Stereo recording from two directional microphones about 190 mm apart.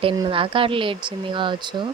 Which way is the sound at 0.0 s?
25° right (ahead or behind).